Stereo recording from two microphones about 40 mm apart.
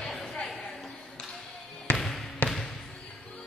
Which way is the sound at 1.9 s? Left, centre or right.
Centre.